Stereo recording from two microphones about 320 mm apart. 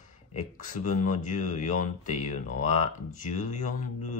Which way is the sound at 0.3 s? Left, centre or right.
Left.